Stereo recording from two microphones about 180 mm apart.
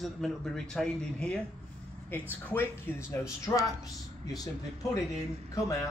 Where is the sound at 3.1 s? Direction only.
15° left (ahead or behind).